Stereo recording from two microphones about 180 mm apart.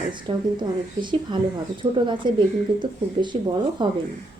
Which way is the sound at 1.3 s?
25° right (ahead or behind).